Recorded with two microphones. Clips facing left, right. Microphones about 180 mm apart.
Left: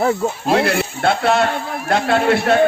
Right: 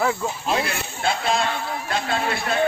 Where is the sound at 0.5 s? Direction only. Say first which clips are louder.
Left 11 dB; 65° left (ahead or behind).